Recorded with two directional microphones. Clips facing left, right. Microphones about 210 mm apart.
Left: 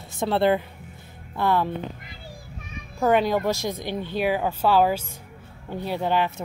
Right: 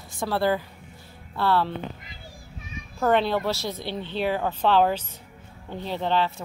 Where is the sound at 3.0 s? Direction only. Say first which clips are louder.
Left 2 dB; 10° left (ahead or behind).